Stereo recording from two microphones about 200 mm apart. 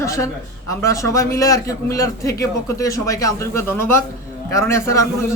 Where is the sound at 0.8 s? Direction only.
15° left (ahead or behind).